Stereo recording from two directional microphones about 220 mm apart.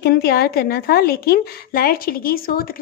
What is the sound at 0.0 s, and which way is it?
A woman's voice, 45° left (ahead or behind).